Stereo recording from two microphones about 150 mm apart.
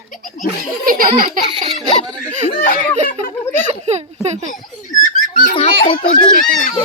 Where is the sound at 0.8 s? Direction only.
70° right (ahead or behind).